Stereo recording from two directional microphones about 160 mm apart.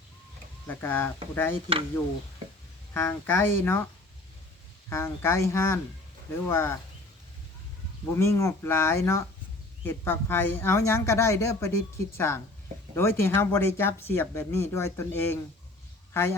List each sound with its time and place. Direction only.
0.7 s speech: 15° left (ahead or behind)
2.9 s speech: 15° left (ahead or behind)
4.9 s speech: 15° left (ahead or behind)
8.1 s speech: 15° left (ahead or behind)